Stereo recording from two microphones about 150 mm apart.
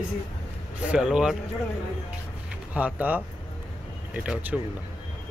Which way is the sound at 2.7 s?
10° right (ahead or behind).